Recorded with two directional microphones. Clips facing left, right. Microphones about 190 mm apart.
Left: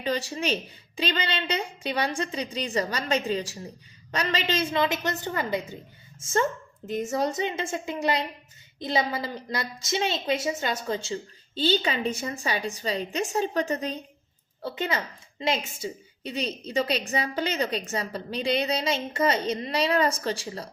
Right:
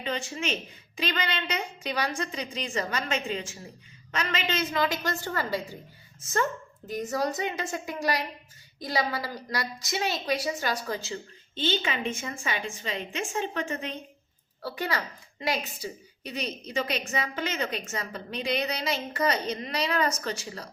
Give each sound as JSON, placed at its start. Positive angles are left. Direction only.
{"t": 0.0, "sound": "a woman's voice", "side_deg": 35}
{"t": 14.6, "sound": "a woman's voice", "side_deg": 20}